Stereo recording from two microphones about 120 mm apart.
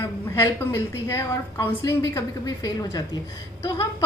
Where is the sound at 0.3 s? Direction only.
20° left (ahead or behind).